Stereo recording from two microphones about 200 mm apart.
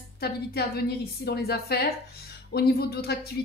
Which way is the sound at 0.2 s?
50° left (ahead or behind).